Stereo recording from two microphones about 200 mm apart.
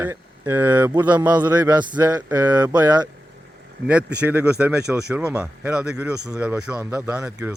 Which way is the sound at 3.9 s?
5° right (ahead or behind).